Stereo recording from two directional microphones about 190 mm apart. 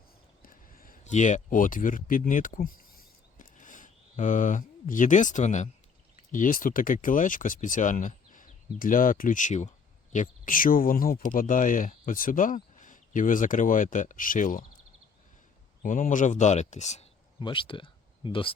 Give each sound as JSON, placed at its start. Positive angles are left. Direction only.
{"t": 0.4, "sound": "speech", "side_deg": 45}
{"t": 3.3, "sound": "a sound", "side_deg": 45}
{"t": 6.3, "sound": "speech", "side_deg": 45}
{"t": 15.8, "sound": "speech", "side_deg": 45}